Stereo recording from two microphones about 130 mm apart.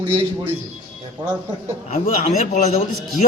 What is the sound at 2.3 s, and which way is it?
Speech, 65° left (ahead or behind).